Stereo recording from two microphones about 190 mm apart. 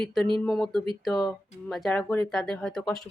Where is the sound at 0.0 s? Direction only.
5° left (ahead or behind).